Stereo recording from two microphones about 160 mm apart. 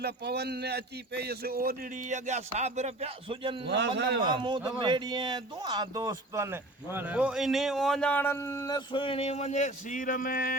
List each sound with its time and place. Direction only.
0.0 s a man's voice: 90° right; by 3.7 s 30° right (ahead or behind)
3.7 s a man's voice: 90° right
4.2 s speech: 30° right (ahead or behind); by 10.5 s 60° left (ahead or behind)